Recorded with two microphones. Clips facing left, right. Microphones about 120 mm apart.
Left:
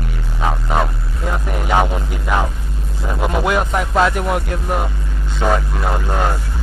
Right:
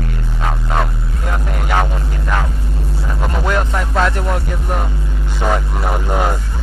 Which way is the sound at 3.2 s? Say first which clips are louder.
Left 2 dB; 10° left (ahead or behind).